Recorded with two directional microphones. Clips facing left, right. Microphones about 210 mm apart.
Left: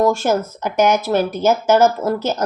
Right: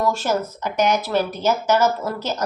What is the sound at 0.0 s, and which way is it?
Speech, 50° left (ahead or behind).